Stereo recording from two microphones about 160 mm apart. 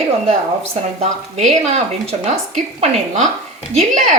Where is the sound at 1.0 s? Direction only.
45° right (ahead or behind).